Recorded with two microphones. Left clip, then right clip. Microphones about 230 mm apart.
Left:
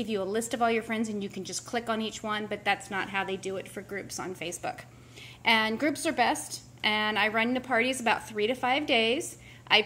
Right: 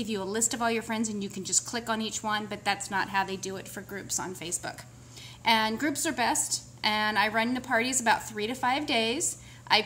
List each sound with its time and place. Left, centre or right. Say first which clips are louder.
0.0 s a woman's voice: left 1 dB; right